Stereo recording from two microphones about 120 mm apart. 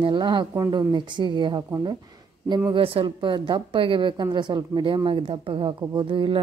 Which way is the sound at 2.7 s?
50° right (ahead or behind).